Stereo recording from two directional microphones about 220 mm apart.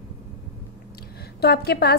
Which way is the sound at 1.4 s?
45° left (ahead or behind).